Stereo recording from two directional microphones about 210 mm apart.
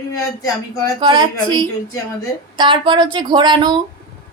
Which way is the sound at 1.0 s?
20° right (ahead or behind).